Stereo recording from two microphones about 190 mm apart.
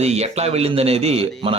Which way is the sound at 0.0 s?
35° right (ahead or behind).